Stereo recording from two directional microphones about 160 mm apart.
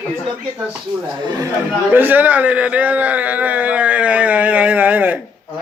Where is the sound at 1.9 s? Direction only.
10° right (ahead or behind).